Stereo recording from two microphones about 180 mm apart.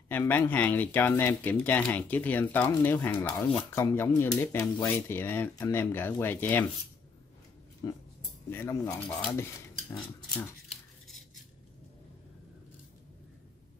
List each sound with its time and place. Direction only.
0.1 s speech: 10° left (ahead or behind)
7.8 s speech: 20° left (ahead or behind)